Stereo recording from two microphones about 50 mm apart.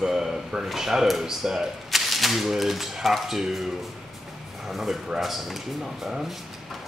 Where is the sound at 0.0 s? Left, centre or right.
Centre.